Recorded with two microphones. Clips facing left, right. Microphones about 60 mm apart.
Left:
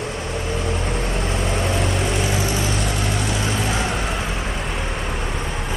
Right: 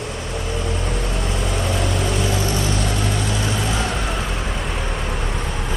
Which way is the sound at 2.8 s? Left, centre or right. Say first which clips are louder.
Right 1 dB; centre.